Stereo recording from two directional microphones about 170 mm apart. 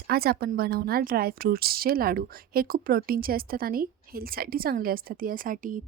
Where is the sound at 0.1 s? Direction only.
65° right (ahead or behind).